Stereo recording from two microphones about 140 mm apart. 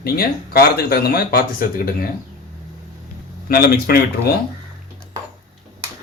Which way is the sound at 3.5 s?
90° left.